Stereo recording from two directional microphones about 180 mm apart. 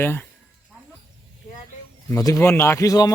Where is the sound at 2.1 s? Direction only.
15° left (ahead or behind).